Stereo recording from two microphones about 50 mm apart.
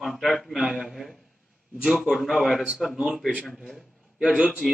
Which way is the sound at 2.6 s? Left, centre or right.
Centre.